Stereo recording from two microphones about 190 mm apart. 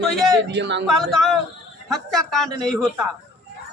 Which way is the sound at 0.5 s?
65° right (ahead or behind).